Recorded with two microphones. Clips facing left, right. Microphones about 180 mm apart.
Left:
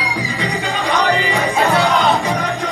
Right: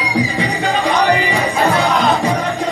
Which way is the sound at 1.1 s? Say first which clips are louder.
Right 2 dB; 15° right (ahead or behind).